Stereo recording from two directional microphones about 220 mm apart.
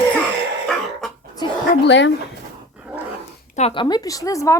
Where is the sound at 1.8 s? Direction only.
55° left (ahead or behind).